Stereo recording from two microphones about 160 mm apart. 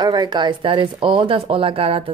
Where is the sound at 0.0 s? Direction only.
25° right (ahead or behind).